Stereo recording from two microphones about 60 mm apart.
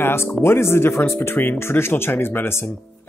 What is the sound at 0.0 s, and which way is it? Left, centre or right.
Speech, left.